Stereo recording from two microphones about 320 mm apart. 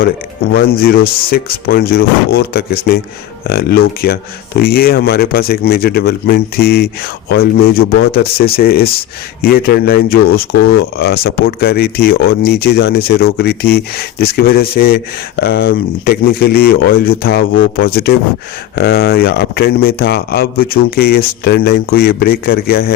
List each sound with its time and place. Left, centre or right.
0.8 s speech: left